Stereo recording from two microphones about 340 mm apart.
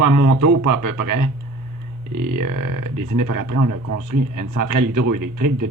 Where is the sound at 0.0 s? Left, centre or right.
Right.